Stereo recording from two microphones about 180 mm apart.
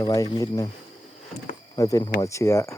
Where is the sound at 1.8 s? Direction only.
20° left (ahead or behind).